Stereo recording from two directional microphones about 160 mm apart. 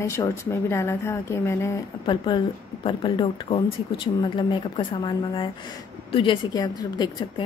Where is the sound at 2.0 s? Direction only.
30° left (ahead or behind).